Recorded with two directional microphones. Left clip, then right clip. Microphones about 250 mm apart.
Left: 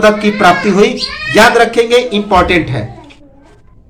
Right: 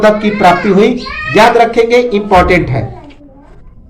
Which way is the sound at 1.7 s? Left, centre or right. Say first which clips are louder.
Right 1 dB; centre.